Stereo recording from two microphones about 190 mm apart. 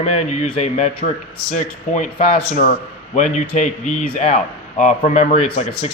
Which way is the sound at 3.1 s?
40° left (ahead or behind).